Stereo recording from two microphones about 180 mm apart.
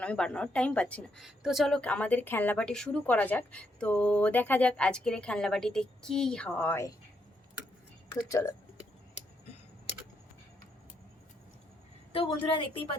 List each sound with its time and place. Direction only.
0.0 s a woman's voice: 5° left (ahead or behind)
8.3 s a woman's voice: 15° left (ahead or behind)
12.1 s a woman's voice: 30° left (ahead or behind)